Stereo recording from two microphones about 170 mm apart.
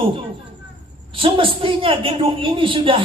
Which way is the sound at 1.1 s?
30° right (ahead or behind).